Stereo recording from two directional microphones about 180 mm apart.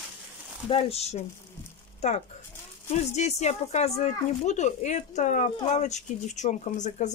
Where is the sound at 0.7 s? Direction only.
35° left (ahead or behind).